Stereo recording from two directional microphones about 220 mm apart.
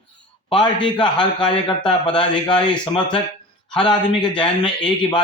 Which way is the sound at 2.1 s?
20° left (ahead or behind).